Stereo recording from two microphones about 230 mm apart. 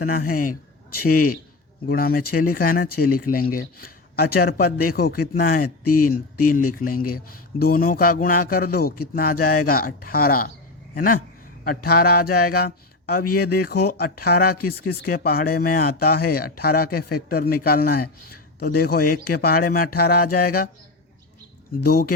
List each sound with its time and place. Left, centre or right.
0.0 s speech: left
5.8 s speech: left
6.7 s speech: left
7.0 s speech: left
7.6 s speech: left
21.8 s speech: left